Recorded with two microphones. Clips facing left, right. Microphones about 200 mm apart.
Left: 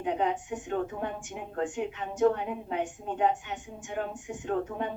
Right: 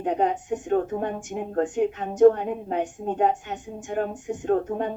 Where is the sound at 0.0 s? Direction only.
45° right (ahead or behind).